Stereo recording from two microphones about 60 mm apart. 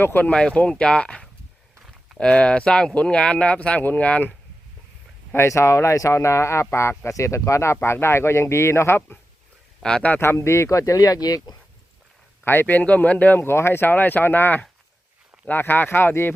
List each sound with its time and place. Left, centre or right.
0.0 s speech: left
0.3 s speech: centre
5.5 s speech: left
9.8 s speech: centre
10.2 s speech: left
12.5 s speech: left